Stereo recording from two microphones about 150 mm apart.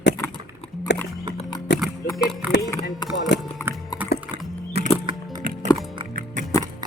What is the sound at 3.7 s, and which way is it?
Dog, 10° right (ahead or behind).